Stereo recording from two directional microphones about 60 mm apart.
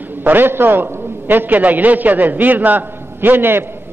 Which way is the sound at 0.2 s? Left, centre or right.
Right.